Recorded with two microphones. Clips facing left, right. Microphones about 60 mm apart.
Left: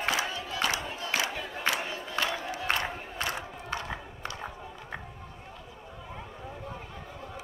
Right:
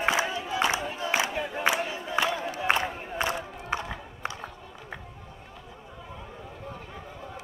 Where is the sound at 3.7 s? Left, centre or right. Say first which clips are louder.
Right 4 dB; centre.